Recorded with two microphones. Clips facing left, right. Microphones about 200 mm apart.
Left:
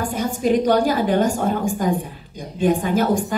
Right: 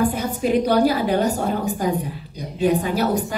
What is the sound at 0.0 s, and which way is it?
A woman's voice, 45° left (ahead or behind).